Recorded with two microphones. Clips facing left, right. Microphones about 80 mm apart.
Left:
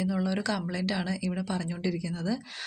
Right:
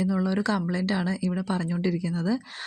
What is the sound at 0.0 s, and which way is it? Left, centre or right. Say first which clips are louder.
A woman's voice: right 4 dB; right.